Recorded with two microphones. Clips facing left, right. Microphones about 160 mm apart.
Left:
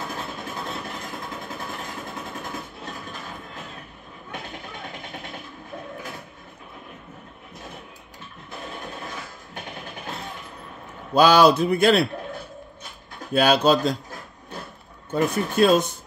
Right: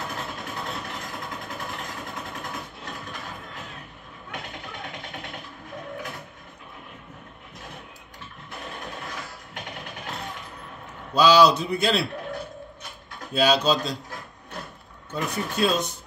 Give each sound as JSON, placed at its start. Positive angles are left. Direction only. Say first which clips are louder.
{"t": 11.1, "sound": "a man's voice", "louder": "left 2 dB", "side_deg": 55}
{"t": 13.3, "sound": "speech", "louder": "left 3 dB", "side_deg": 55}
{"t": 15.0, "sound": "speech", "louder": "left 6 dB", "side_deg": 50}